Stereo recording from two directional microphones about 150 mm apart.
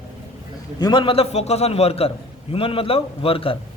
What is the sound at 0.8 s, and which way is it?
A man's voice, 30° left (ahead or behind).